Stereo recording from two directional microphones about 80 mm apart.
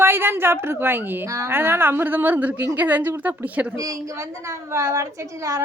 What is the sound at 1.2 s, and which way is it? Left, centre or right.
Speech, right.